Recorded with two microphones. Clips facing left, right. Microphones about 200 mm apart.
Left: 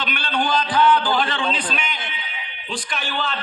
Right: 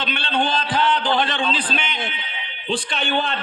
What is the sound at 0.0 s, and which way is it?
A man's voice, 25° right (ahead or behind).